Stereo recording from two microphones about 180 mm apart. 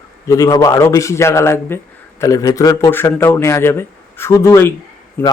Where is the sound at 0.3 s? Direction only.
20° left (ahead or behind).